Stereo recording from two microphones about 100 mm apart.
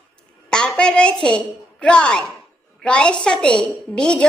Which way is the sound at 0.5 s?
10° left (ahead or behind).